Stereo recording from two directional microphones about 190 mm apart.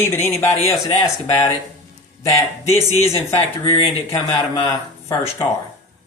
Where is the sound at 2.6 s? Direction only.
35° left (ahead or behind).